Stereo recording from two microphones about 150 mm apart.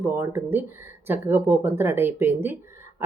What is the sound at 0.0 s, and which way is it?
Speech, 15° right (ahead or behind).